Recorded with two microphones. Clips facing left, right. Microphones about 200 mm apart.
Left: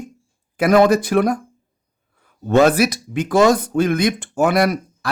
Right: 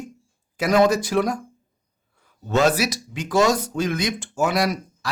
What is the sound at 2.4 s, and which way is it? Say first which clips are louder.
Speech: left 6 dB; 55° left (ahead or behind).